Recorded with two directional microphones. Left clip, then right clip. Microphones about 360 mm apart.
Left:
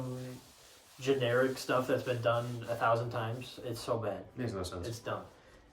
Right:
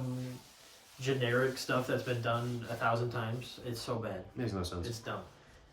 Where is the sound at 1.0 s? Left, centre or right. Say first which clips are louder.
Left 2 dB; centre.